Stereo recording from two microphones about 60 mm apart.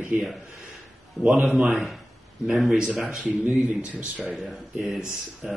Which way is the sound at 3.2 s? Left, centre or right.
Right.